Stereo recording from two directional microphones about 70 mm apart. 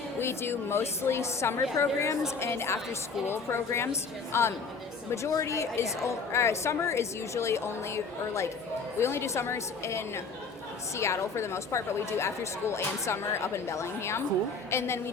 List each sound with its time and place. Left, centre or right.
0.2 s a woman's voice: left